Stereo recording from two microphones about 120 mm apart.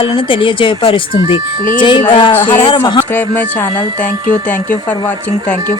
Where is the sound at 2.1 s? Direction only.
40° left (ahead or behind).